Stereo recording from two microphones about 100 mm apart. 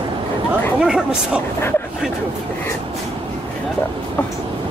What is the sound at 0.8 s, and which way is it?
Speech, 10° right (ahead or behind).